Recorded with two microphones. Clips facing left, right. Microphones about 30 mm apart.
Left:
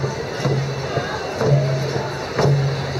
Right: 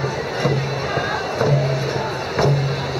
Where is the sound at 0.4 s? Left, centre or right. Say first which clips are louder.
Right 2 dB; centre.